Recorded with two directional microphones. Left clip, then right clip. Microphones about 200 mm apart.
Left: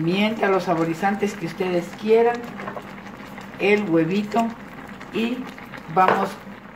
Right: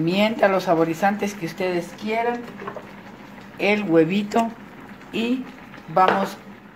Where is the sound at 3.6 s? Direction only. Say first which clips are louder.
Right 1 dB; 45° right (ahead or behind).